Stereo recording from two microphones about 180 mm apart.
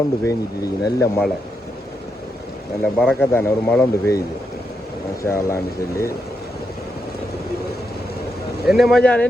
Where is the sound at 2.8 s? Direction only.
5° left (ahead or behind).